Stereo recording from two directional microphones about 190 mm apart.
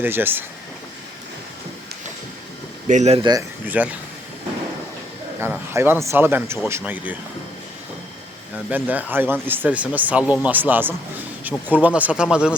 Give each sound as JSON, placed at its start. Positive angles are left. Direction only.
{"t": 0.0, "sound": "speech", "side_deg": -10}
{"t": 2.8, "sound": "speech", "side_deg": -40}
{"t": 3.7, "sound": "speech", "side_deg": -10}
{"t": 5.4, "sound": "speech", "side_deg": -10}
{"t": 8.7, "sound": "speech", "side_deg": -10}